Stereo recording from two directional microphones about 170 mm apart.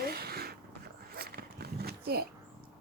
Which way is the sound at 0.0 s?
65° right (ahead or behind).